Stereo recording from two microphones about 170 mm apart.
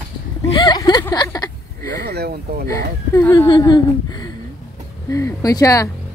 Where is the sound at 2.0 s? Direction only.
70° right (ahead or behind).